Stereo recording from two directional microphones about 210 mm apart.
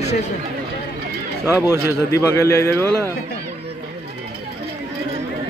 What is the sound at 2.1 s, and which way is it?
Speech, 15° left (ahead or behind).